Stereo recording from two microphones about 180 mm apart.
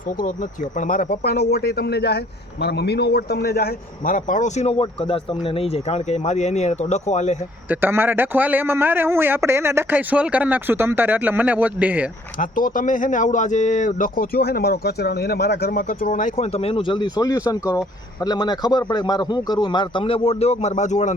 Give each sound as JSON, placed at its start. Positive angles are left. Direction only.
{"t": 0.2, "sound": "speech", "side_deg": 45}
{"t": 1.5, "sound": "a man's voice", "side_deg": 60}
{"t": 7.7, "sound": "a man's voice", "side_deg": -10}
{"t": 12.4, "sound": "speech", "side_deg": 50}